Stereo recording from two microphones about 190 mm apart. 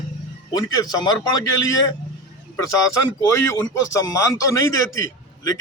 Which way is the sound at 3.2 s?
15° left (ahead or behind).